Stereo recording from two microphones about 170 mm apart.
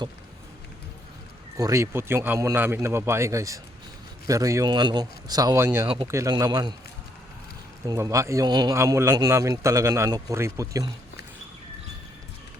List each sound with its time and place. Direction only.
1.5 s a man's voice: 20° right (ahead or behind)
7.9 s a man's voice: 20° right (ahead or behind)